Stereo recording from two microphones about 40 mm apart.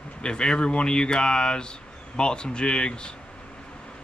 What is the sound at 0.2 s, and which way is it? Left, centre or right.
Speech, left.